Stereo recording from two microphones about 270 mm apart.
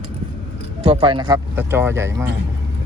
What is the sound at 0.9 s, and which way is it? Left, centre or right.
Speech, centre.